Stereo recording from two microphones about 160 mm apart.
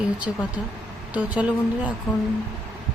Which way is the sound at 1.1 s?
10° right (ahead or behind).